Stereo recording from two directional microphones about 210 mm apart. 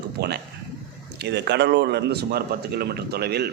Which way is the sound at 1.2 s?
55° right (ahead or behind).